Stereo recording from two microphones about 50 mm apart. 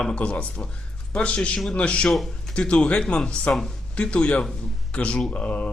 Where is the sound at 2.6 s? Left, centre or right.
Left.